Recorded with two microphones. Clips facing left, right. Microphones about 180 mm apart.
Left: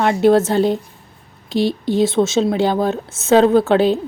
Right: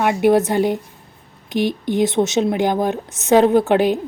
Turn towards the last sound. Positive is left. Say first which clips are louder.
# left 1 dB
turn(degrees=-15)  # may be behind; listen again after turning